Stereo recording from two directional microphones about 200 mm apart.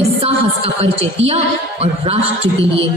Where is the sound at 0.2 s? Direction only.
30° right (ahead or behind).